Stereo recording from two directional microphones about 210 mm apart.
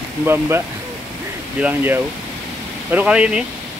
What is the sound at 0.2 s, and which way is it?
Speech, 10° right (ahead or behind).